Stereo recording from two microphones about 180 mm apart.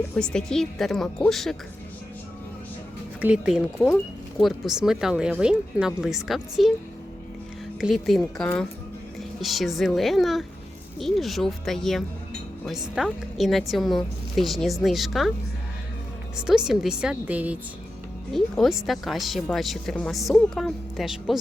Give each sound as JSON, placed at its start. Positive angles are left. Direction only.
{"t": 0.2, "sound": "speech", "side_deg": 5}
{"t": 3.2, "sound": "speech", "side_deg": -5}
{"t": 7.8, "sound": "speech", "side_deg": 0}
{"t": 16.5, "sound": "speech", "side_deg": -5}